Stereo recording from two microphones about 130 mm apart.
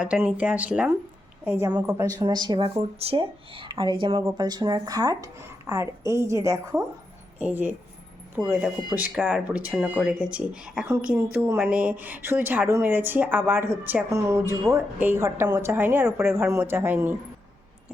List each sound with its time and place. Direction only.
0.0 s a woman's voice: 10° right (ahead or behind); by 6.8 s 25° right (ahead or behind)
7.3 s a woman's voice: 15° right (ahead or behind)